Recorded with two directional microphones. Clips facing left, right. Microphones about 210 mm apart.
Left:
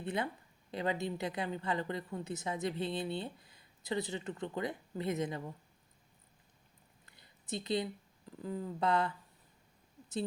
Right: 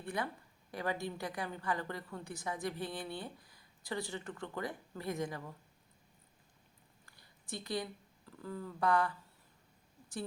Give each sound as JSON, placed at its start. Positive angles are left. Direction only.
{"t": 0.0, "sound": "a woman's voice", "side_deg": 20}
{"t": 7.0, "sound": "a sound", "side_deg": 20}
{"t": 8.4, "sound": "a woman's voice", "side_deg": 20}